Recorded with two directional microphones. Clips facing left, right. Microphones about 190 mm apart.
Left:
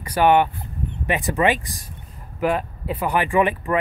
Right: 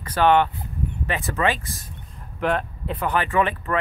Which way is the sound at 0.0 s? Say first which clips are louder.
Left 1 dB; 10° left (ahead or behind).